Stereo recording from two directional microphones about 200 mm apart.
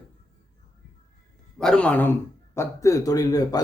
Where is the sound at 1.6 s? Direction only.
5° left (ahead or behind).